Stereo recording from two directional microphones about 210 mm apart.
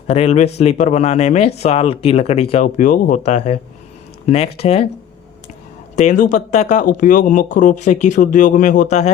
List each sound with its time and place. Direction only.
0.1 s speech: 30° left (ahead or behind)
6.0 s speech: 35° left (ahead or behind)